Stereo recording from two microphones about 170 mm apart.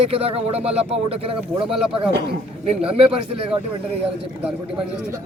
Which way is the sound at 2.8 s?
35° right (ahead or behind).